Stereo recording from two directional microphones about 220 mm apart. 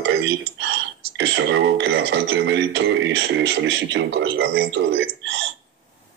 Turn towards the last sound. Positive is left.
turn(degrees=-55)  # may be behind; listen again after turning